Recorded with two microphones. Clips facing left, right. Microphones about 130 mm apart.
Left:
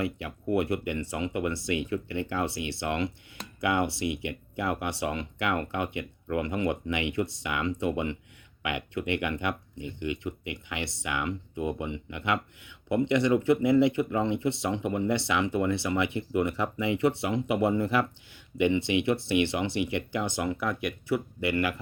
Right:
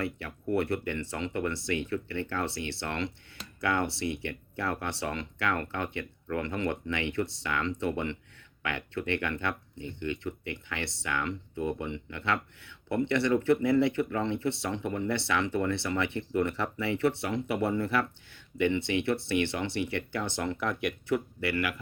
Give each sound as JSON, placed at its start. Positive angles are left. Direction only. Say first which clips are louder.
{"t": 0.0, "sound": "speech", "louder": "left 3 dB", "side_deg": 15}
{"t": 21.4, "sound": "speech", "louder": "left 3 dB", "side_deg": 25}